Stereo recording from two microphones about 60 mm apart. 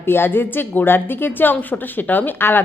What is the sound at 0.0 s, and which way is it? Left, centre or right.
A woman's voice, left.